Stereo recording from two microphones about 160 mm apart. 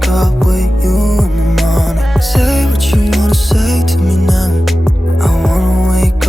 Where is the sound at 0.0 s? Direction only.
Centre (ahead or behind).